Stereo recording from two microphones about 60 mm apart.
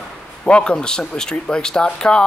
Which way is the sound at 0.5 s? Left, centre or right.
Centre.